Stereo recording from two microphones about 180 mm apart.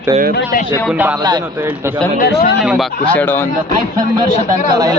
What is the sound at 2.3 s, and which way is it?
Speech, 65° left (ahead or behind).